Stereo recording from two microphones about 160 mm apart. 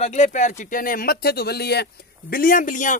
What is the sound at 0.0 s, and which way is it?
Speech, 45° left (ahead or behind).